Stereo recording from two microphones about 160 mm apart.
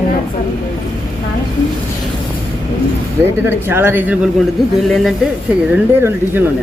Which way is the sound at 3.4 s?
15° right (ahead or behind).